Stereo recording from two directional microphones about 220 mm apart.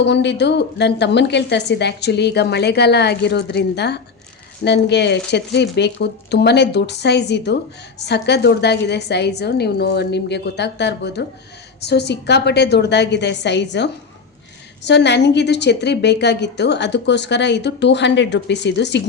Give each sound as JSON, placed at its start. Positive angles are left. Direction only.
{"t": 0.0, "sound": "a woman's voice", "side_deg": 50}